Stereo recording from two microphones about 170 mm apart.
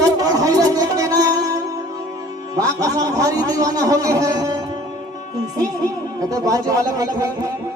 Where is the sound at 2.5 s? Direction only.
20° right (ahead or behind).